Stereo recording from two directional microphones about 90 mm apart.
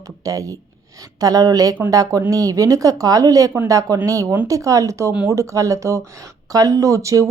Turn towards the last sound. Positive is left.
turn(degrees=-35)  # may be behind; listen again after turning